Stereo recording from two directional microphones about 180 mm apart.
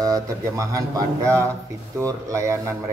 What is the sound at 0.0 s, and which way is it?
Speech, 20° right (ahead or behind).